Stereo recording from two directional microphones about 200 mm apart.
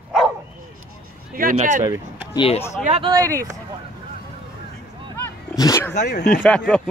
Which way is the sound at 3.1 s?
15° right (ahead or behind).